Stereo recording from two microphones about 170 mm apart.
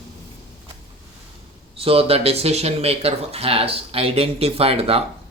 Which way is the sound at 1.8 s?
35° right (ahead or behind).